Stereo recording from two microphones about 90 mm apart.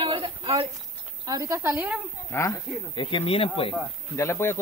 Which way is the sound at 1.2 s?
40° right (ahead or behind).